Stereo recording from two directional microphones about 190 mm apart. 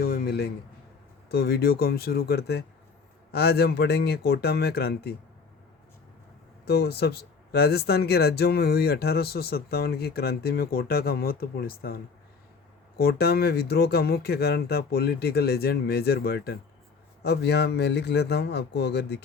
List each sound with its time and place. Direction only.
0.0 s a man's voice: 55° left (ahead or behind)
6.7 s speech: 60° left (ahead or behind)
13.0 s speech: 55° left (ahead or behind)